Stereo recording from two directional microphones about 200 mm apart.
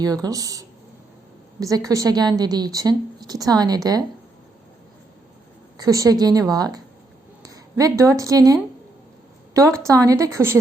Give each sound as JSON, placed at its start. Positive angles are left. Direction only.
{"t": 0.0, "sound": "a woman's voice", "side_deg": -20}
{"t": 5.7, "sound": "a woman's voice", "side_deg": -15}